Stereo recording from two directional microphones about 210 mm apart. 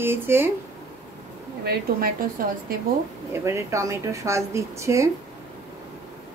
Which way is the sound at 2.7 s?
45° right (ahead or behind).